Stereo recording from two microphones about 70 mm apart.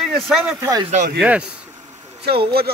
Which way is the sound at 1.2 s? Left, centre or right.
Centre.